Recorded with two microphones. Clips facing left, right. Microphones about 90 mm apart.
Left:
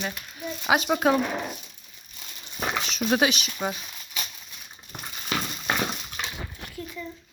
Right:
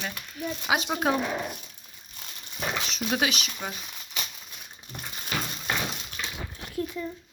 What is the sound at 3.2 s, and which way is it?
Speech, 20° left (ahead or behind).